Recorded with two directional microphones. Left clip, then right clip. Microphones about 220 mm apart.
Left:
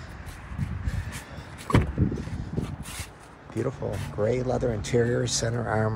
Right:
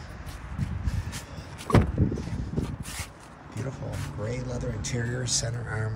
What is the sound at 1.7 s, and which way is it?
Vehicle, 45° right (ahead or behind).